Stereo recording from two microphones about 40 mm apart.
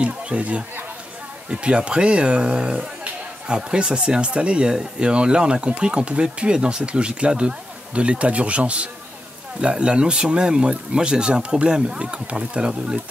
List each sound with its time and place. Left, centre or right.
0.0 s speech: right